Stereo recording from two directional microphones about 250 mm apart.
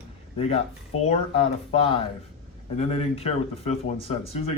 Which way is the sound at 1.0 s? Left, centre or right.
Left.